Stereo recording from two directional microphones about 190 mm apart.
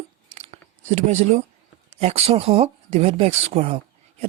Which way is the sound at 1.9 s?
35° right (ahead or behind).